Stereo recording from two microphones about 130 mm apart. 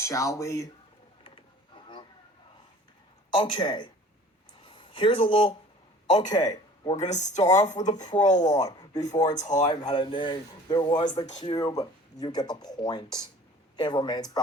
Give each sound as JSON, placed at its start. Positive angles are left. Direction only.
{"t": 0.0, "sound": "speech", "side_deg": 25}
{"t": 3.3, "sound": "speech", "side_deg": 40}
{"t": 6.3, "sound": "speech", "side_deg": 30}
{"t": 7.0, "sound": "speech", "side_deg": 65}
{"t": 7.9, "sound": "chopping", "side_deg": 70}
{"t": 8.6, "sound": "speech", "side_deg": 30}
{"t": 9.3, "sound": "speech", "side_deg": 65}
{"t": 9.6, "sound": "speech", "side_deg": 35}